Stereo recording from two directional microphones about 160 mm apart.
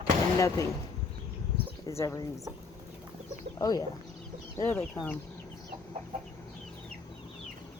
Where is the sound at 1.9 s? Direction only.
20° left (ahead or behind).